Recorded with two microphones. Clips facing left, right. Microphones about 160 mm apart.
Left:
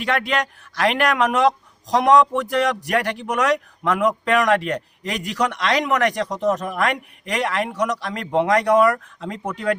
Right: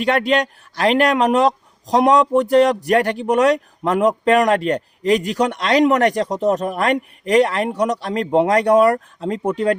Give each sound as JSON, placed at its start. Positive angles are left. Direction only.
{"t": 0.0, "sound": "a man's voice", "side_deg": -35}